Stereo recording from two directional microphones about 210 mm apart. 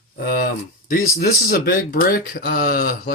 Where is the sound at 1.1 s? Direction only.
45° left (ahead or behind).